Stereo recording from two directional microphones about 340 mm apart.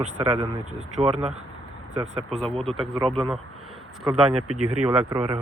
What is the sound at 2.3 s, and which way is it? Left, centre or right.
Speech, centre.